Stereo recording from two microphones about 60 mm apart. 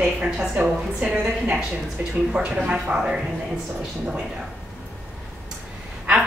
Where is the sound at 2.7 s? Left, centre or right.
Centre.